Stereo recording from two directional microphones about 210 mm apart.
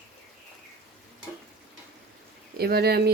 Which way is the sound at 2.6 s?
50° right (ahead or behind).